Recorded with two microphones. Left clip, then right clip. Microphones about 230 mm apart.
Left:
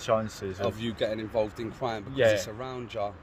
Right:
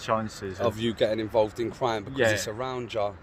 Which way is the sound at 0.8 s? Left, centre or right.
Right.